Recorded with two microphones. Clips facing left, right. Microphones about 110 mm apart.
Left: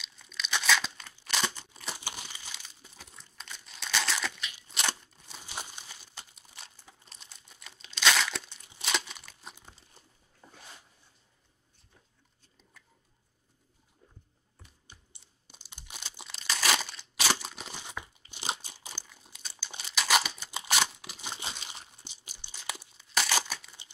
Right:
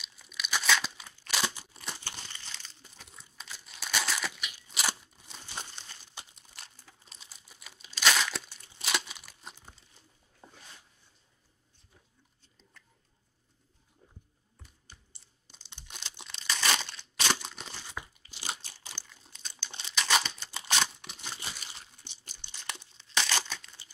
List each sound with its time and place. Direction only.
0.0 s tearing: 5° right (ahead or behind)
2.0 s crumpling: 10° left (ahead or behind); by 5.4 s 5° right (ahead or behind)
5.4 s crumpling: 10° left (ahead or behind)
6.5 s crumpling: centre (ahead or behind)
10.4 s dog: 30° right (ahead or behind)
15.5 s crumpling: 10° left (ahead or behind)
18.0 s crunch: 20° left (ahead or behind)
18.9 s crumpling: 10° left (ahead or behind)
21.2 s crumpling: 20° left (ahead or behind)
22.0 s tearing: 10° left (ahead or behind)